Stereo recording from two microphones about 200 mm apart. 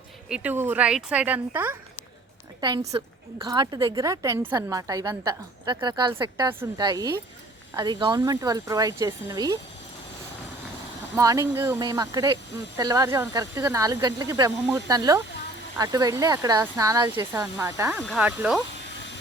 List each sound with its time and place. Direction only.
0.3 s speech: 5° right (ahead or behind)
2.6 s speech: 20° right (ahead or behind)
11.2 s speech: 15° right (ahead or behind)